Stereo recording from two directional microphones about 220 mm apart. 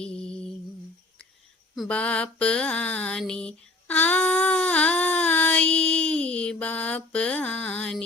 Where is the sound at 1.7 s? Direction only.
5° left (ahead or behind).